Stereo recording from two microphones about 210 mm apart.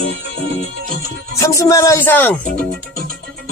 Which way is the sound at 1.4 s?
15° left (ahead or behind).